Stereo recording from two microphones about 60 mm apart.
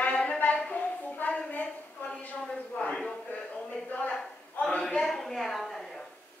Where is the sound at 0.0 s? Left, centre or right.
Centre.